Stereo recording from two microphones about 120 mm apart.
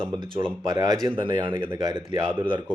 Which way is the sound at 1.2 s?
40° right (ahead or behind).